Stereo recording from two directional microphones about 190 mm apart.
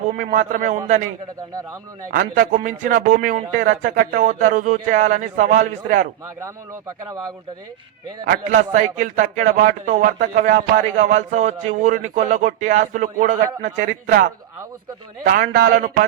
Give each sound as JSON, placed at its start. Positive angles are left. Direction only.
{"t": 0.2, "sound": "a man's voice", "side_deg": -45}
{"t": 2.0, "sound": "a man's voice", "side_deg": -45}
{"t": 8.2, "sound": "a man's voice", "side_deg": -50}